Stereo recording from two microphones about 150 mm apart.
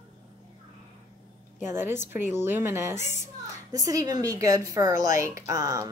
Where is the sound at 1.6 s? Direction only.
15° right (ahead or behind).